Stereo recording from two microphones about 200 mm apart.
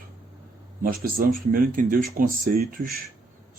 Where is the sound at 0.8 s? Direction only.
45° right (ahead or behind).